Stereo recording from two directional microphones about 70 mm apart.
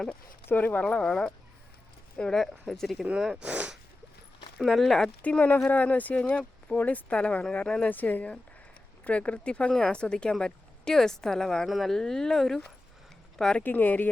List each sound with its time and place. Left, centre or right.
0.4 s speech: left; by 3.1 s centre
3.1 s speech: centre
3.5 s speech: centre
4.5 s speech: centre
5.2 s speech: left; by 12.7 s centre
13.6 s speech: left